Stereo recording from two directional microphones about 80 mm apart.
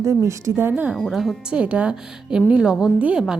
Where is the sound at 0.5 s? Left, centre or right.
Right.